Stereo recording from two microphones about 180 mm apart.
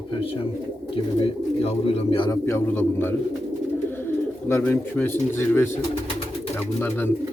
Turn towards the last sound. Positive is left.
turn(degrees=10)  # may be behind; listen again after turning